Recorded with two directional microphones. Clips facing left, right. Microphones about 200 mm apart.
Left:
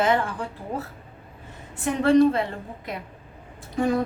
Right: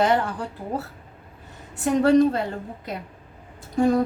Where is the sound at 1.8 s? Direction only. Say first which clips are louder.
Right 1 dB; 40° right (ahead or behind).